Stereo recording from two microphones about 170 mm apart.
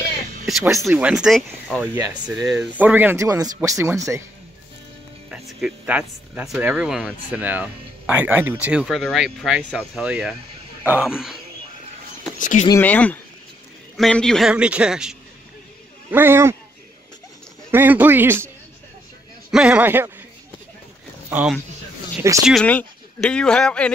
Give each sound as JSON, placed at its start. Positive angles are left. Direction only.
{"t": 0.5, "sound": "speech", "side_deg": 0}
{"t": 5.3, "sound": "speech", "side_deg": -5}
{"t": 12.4, "sound": "speech", "side_deg": 50}
{"t": 12.8, "sound": "speech", "side_deg": 10}
{"t": 17.6, "sound": "speech", "side_deg": -10}
{"t": 19.5, "sound": "speech", "side_deg": -5}
{"t": 21.3, "sound": "speech", "side_deg": -10}
{"t": 22.4, "sound": "speech", "side_deg": 0}